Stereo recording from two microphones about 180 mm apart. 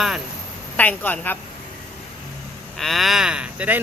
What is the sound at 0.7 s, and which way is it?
Speech, 10° left (ahead or behind).